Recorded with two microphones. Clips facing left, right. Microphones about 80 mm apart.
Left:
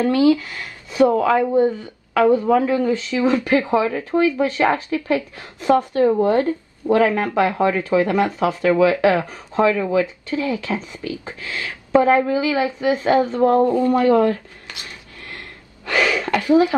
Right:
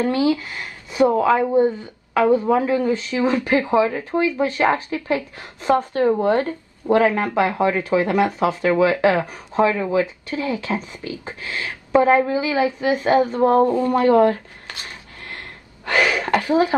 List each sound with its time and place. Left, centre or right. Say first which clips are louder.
0.0 s speech: left 3 dB; right
6.0 s speech: left 1 dB; right
15.8 s speech: even; right